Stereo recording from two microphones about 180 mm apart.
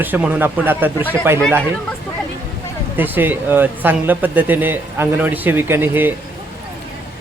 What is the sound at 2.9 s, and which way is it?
Speech, 10° right (ahead or behind).